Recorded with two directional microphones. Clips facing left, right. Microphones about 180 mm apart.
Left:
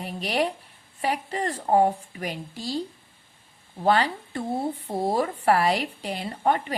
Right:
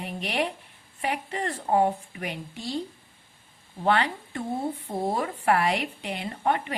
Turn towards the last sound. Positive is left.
turn(degrees=35)  # may be behind; listen again after turning